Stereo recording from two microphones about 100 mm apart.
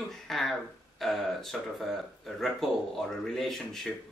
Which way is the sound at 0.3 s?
Centre (ahead or behind).